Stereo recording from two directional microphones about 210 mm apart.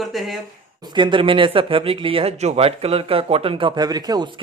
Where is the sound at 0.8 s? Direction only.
20° right (ahead or behind).